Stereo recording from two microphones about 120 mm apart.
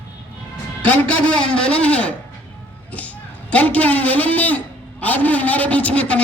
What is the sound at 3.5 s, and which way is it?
A man's voice, 10° left (ahead or behind).